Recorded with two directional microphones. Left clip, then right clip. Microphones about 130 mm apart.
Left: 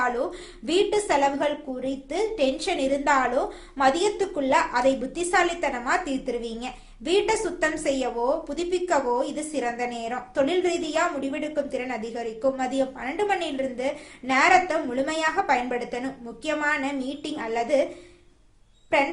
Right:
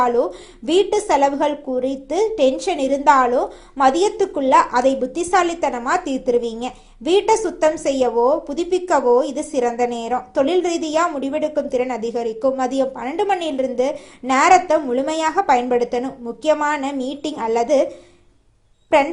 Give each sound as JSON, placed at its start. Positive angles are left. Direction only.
{"t": 0.6, "sound": "a woman's voice", "side_deg": -35}